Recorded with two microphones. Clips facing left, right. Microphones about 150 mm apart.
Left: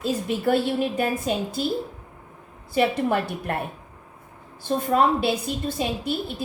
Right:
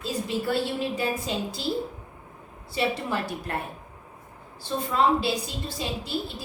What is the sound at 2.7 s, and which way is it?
Speech, 55° left (ahead or behind).